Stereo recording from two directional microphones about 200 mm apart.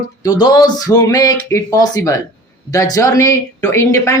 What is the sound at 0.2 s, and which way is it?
A woman's voice, 20° left (ahead or behind).